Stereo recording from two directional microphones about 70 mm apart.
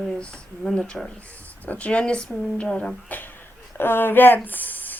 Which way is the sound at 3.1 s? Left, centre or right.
Left.